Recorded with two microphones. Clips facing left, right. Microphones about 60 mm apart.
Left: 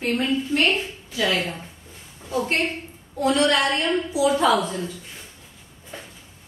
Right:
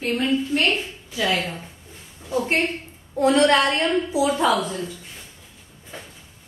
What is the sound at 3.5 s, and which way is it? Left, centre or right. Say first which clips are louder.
Speech: right 2 dB; right.